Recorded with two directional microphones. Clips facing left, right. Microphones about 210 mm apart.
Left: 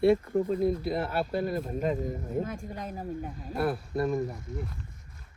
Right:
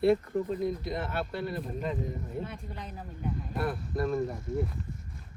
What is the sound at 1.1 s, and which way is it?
Speech, 40° left (ahead or behind).